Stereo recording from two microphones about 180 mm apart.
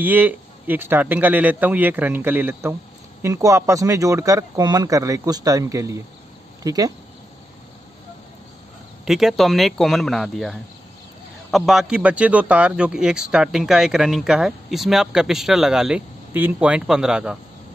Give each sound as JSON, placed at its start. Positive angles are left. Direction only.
{"t": 0.0, "sound": "speech", "side_deg": -10}
{"t": 9.0, "sound": "a man's voice", "side_deg": 0}